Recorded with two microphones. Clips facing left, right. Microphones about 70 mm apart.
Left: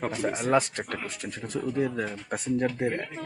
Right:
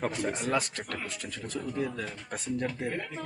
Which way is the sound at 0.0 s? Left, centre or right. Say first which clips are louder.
Left 3 dB; centre.